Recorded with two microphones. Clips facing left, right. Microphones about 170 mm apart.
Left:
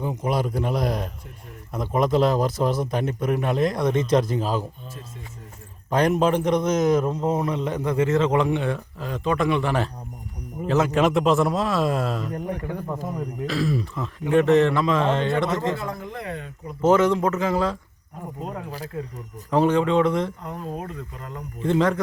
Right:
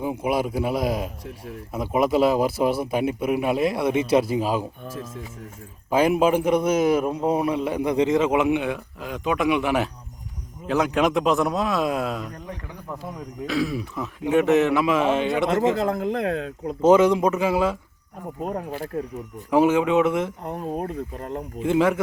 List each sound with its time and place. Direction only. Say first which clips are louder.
0.0 s a man's voice: right 1 dB; 10° right (ahead or behind)
5.9 s a man's voice: right 1 dB; 5° right (ahead or behind)
12.5 s speech: left 8 dB; 50° left (ahead or behind)
13.1 s speech: right 3 dB; centre (ahead or behind)
15.8 s speech: right 9 dB; 90° right
16.8 s a man's voice: right 2 dB; 15° right (ahead or behind)
19.5 s a man's voice: right 1 dB; 5° right (ahead or behind)
20.4 s speech: right 4 dB; 55° right (ahead or behind)
21.6 s a man's voice: right 1 dB; 5° right (ahead or behind)